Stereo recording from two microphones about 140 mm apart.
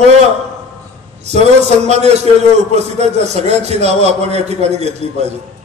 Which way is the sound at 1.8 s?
50° right (ahead or behind).